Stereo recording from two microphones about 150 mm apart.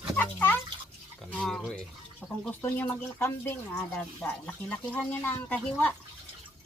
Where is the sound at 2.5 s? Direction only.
10° left (ahead or behind).